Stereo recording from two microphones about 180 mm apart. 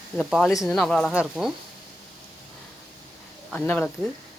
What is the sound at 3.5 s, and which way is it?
Speech, 5° left (ahead or behind).